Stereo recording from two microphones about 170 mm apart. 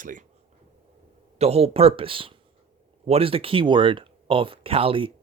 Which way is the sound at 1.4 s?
35° right (ahead or behind).